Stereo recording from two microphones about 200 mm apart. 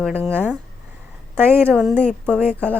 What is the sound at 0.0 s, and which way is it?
Speech, 10° right (ahead or behind).